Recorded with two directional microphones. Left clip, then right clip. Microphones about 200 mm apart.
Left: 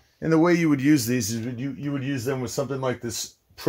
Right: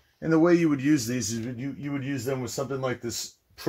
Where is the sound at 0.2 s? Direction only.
50° left (ahead or behind).